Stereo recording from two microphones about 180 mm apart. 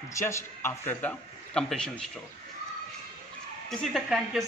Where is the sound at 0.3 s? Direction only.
15° left (ahead or behind).